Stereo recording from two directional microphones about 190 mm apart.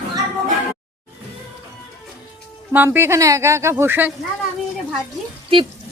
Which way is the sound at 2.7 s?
10° right (ahead or behind).